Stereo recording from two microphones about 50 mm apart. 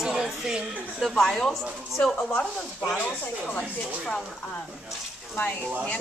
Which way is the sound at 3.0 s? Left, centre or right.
Left.